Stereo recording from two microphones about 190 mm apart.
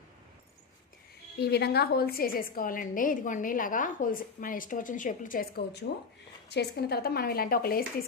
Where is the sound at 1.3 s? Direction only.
60° left (ahead or behind).